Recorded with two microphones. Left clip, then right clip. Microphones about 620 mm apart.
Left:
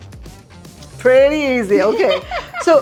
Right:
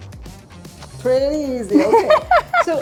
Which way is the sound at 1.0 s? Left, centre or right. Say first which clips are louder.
Left 6 dB; left.